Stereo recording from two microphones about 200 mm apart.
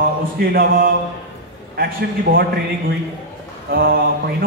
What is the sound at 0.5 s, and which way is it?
Speech, 50° right (ahead or behind).